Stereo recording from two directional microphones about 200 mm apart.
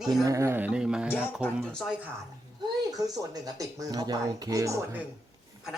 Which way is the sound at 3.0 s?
20° right (ahead or behind).